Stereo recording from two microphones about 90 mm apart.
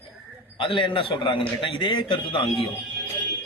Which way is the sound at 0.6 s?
75° left (ahead or behind).